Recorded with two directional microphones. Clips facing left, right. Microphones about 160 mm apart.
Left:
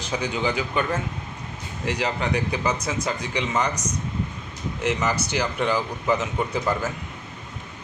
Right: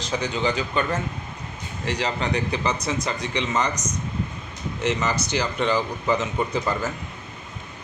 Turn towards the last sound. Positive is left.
turn(degrees=5)  # may be behind; listen again after turning